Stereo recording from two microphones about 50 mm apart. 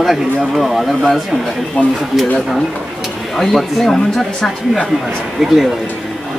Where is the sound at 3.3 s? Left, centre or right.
Centre.